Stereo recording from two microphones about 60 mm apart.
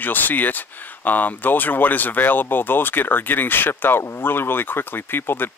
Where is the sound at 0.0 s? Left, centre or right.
Left.